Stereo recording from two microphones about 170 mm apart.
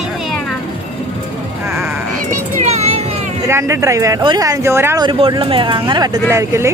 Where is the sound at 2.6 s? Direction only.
40° right (ahead or behind).